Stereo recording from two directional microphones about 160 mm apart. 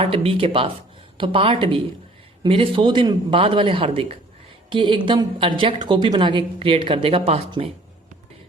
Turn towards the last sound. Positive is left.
turn(degrees=-35)  # may be behind; listen again after turning